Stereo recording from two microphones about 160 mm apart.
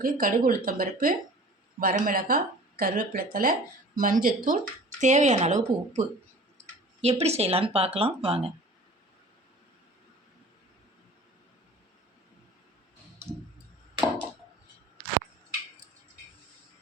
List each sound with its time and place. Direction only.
0.0 s speech: 60° right (ahead or behind)
7.0 s speech: 40° right (ahead or behind)